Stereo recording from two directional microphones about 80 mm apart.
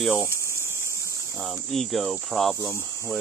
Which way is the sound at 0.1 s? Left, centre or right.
Left.